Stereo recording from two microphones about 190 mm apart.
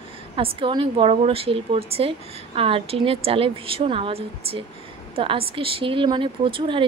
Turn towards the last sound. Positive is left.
turn(degrees=-25)  # may be behind; listen again after turning